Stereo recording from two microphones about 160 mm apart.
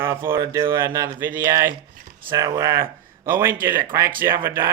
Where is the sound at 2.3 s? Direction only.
20° right (ahead or behind).